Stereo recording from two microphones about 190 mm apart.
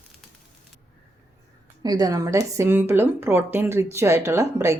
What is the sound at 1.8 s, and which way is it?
Speech, 20° right (ahead or behind).